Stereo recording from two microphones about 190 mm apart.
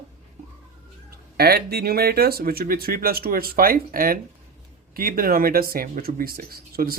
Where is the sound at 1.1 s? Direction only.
55° right (ahead or behind).